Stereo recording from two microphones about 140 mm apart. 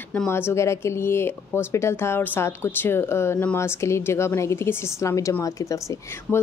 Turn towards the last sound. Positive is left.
turn(degrees=20)  # may be behind; listen again after turning